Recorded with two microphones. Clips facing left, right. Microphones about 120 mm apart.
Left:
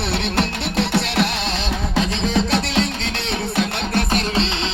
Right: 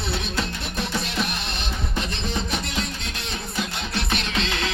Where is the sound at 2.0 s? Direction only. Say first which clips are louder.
Left 9 dB; 90° left.